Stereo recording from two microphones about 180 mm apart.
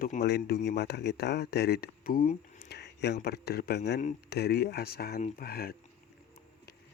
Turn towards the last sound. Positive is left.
turn(degrees=60)  # may be behind; listen again after turning